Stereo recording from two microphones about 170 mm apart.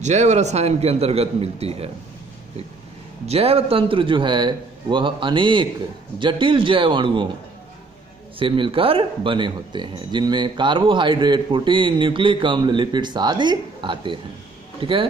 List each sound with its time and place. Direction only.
0.0 s a man's voice: 40° right (ahead or behind)
3.3 s speech: 35° right (ahead or behind)
8.4 s speech: 30° right (ahead or behind)